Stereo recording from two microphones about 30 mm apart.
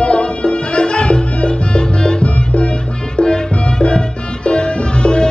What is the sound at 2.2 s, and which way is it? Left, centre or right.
Music, left.